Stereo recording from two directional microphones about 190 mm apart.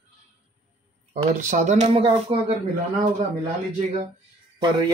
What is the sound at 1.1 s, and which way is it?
Speech, 35° right (ahead or behind).